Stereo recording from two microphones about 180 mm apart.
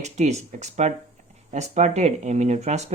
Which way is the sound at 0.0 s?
40° right (ahead or behind).